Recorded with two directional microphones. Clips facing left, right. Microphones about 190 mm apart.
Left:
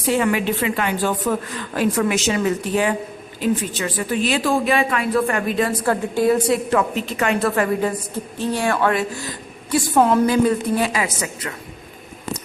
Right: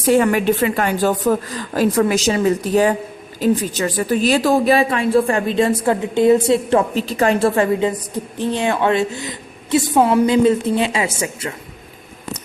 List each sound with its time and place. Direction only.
0.1 s a woman's voice: 45° right (ahead or behind); by 10.2 s 10° right (ahead or behind)
10.2 s a woman's voice: 25° right (ahead or behind)